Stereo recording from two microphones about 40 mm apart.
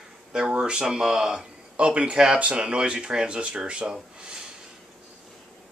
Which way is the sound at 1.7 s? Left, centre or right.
Right.